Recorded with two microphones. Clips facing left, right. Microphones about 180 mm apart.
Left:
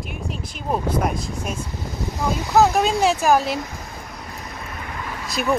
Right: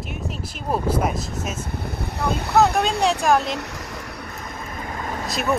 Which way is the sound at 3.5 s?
75° right (ahead or behind).